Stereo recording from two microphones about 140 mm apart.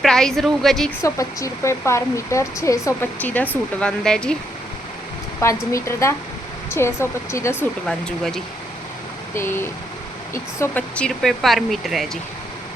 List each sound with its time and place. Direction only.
0.0 s a woman's voice: 5° left (ahead or behind)
1.0 s speech: 20° left (ahead or behind); by 4.4 s 5° left (ahead or behind)
5.4 s speech: 20° left (ahead or behind)
7.9 s speech: 5° left (ahead or behind)
9.3 s speech: 15° left (ahead or behind)